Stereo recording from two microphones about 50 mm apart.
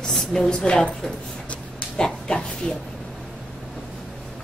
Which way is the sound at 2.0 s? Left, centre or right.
Centre.